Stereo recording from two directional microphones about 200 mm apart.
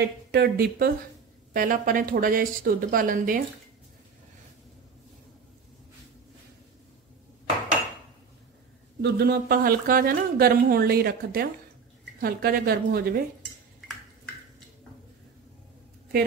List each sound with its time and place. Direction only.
0.3 s speech: 50° right (ahead or behind)
9.0 s speech: 50° right (ahead or behind)
13.7 s a sound: centre (ahead or behind)